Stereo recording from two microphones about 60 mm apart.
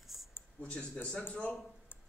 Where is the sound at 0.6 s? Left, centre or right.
Centre.